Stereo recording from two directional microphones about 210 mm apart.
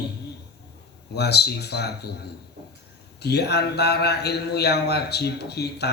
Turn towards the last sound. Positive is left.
turn(degrees=50)  # may be behind; listen again after turning